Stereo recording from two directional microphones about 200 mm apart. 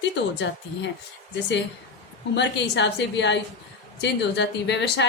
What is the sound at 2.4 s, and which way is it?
A woman's voice, 60° left (ahead or behind).